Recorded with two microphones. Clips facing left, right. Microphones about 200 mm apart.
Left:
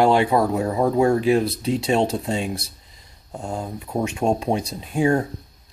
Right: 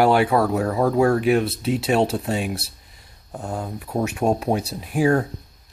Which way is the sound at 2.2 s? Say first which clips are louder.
Even; 25° left (ahead or behind).